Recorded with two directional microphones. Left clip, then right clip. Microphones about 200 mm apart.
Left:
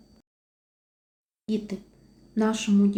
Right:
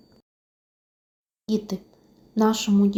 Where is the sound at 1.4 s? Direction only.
20° right (ahead or behind).